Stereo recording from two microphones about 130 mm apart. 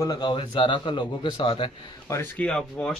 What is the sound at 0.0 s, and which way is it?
A man's voice, 30° left (ahead or behind).